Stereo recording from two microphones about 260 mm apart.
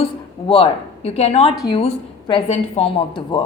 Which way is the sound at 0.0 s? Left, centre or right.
Left.